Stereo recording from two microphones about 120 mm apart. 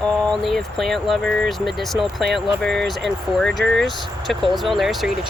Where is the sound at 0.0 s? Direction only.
5° left (ahead or behind).